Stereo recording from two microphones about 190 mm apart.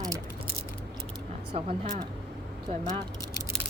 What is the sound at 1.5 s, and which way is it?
Speech, 30° right (ahead or behind).